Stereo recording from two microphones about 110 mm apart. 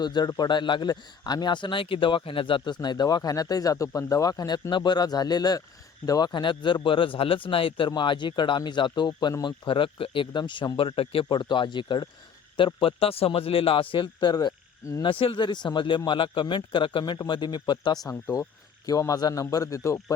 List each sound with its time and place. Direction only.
0.0 s a man's voice: 40° left (ahead or behind)